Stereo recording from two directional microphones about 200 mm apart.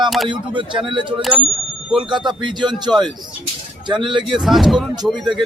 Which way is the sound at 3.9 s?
25° right (ahead or behind).